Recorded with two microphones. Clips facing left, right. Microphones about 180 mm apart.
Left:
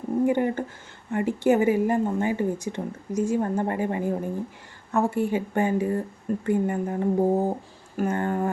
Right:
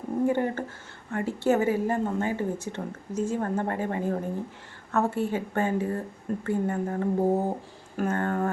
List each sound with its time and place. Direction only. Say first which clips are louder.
0.3 s a woman's voice: left 3 dB; 15° left (ahead or behind)